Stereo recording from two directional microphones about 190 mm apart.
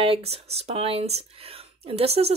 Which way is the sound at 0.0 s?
30° right (ahead or behind).